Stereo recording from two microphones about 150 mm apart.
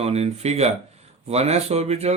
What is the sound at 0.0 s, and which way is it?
Speech, 45° right (ahead or behind).